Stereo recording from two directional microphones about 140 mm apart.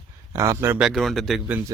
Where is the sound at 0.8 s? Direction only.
Centre (ahead or behind).